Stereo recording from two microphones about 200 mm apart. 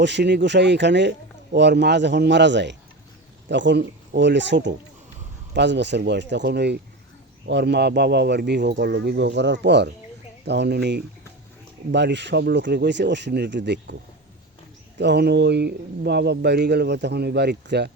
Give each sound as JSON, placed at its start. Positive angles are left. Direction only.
{"t": 0.0, "sound": "speech", "side_deg": -60}
{"t": 14.9, "sound": "speech", "side_deg": -60}